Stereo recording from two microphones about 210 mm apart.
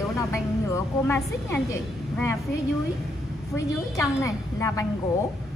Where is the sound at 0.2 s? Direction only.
15° left (ahead or behind).